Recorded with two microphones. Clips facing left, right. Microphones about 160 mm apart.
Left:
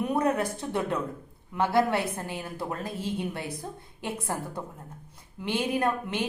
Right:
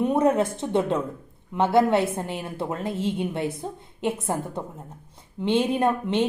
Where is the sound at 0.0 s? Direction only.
25° right (ahead or behind).